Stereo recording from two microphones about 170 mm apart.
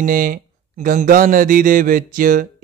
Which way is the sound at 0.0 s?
55° right (ahead or behind).